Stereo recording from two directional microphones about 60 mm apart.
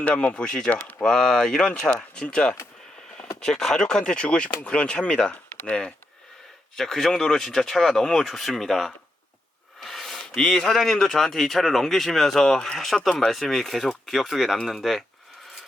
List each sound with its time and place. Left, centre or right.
0.0 s speech: left
0.7 s speech: left
1.0 s speech: centre
6.7 s speech: centre
9.8 s a sound: centre
10.4 s speech: centre
10.7 s speech: centre